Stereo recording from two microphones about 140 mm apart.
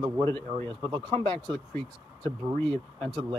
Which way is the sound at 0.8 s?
35° right (ahead or behind).